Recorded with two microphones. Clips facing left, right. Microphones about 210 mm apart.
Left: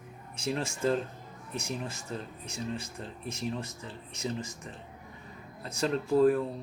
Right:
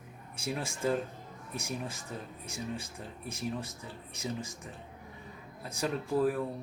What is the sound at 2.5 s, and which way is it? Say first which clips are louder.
Speech: left 2 dB; 10° right (ahead or behind).